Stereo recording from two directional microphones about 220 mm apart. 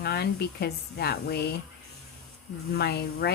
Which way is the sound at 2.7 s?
45° left (ahead or behind).